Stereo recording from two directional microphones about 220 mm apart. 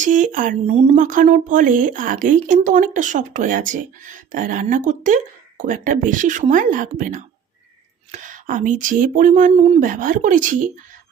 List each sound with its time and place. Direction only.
0.0 s a woman's voice: 35° right (ahead or behind)